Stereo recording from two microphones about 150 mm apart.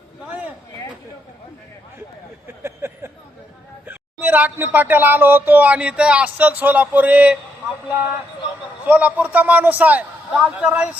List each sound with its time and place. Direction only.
2.6 s a sound: 15° right (ahead or behind)
3.8 s speech: 10° right (ahead or behind)
8.9 s speech: 10° right (ahead or behind)